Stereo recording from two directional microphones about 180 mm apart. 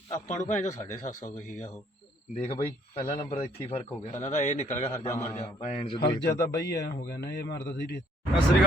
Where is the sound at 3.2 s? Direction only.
35° left (ahead or behind).